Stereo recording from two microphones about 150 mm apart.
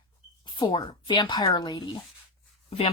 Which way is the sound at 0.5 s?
30° left (ahead or behind).